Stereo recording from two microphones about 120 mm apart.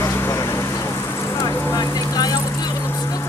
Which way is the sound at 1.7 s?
35° left (ahead or behind).